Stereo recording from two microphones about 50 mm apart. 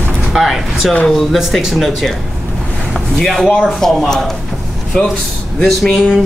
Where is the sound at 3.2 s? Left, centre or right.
Centre.